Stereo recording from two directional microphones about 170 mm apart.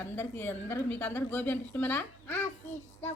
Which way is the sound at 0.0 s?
10° left (ahead or behind).